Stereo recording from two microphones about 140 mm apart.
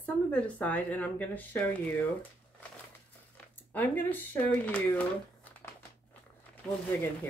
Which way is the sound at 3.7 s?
10° left (ahead or behind).